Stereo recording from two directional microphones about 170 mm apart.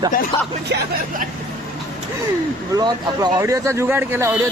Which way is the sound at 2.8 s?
25° right (ahead or behind).